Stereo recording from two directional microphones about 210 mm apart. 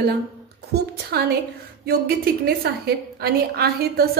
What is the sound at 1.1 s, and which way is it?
A woman's voice, 50° right (ahead or behind).